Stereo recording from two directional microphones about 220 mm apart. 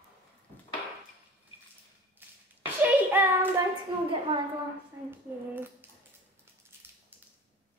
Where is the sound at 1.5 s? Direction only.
25° left (ahead or behind).